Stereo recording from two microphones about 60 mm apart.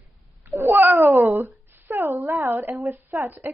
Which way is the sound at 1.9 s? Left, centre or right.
Right.